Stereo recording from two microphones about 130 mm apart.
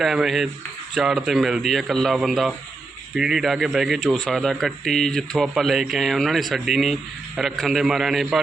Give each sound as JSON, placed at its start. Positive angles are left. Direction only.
{"t": 0.0, "sound": "speech", "side_deg": -5}